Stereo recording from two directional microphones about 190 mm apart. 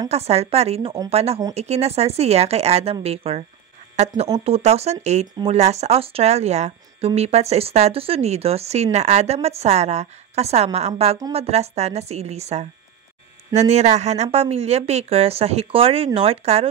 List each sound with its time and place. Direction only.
0.1 s speech: 35° right (ahead or behind)